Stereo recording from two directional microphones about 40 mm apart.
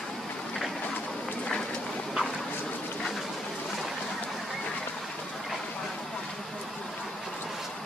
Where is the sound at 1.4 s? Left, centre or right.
Left.